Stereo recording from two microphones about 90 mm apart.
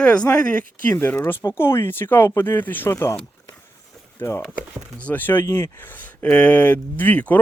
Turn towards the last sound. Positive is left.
turn(degrees=15)  # may be behind; listen again after turning